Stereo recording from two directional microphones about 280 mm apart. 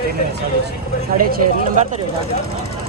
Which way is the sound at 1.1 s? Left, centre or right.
Right.